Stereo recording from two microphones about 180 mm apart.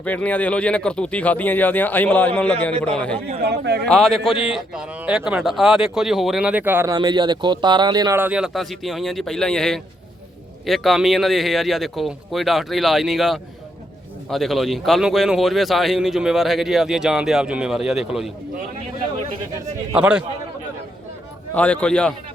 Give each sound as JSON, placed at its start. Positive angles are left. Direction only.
{"t": 0.0, "sound": "speech", "side_deg": 10}
{"t": 3.4, "sound": "a man's voice", "side_deg": -65}
{"t": 3.8, "sound": "a man's voice", "side_deg": 5}
{"t": 8.2, "sound": "a man's voice", "side_deg": -5}
{"t": 19.9, "sound": "a man's voice", "side_deg": -5}
{"t": 21.5, "sound": "speech", "side_deg": 10}